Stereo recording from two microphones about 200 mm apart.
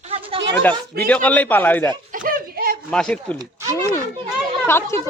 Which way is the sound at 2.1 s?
45° right (ahead or behind).